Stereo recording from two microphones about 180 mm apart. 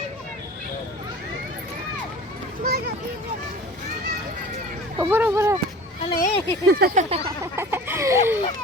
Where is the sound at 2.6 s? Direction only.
60° right (ahead or behind).